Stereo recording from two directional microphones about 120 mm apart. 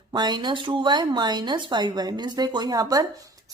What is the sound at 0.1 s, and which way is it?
A woman's voice, 35° right (ahead or behind).